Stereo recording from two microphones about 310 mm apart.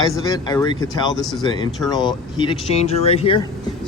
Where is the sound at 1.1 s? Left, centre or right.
Centre.